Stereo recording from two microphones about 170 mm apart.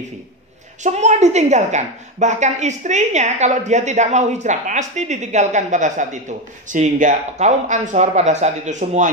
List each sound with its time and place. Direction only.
0.8 s a woman's voice: 45° right (ahead or behind)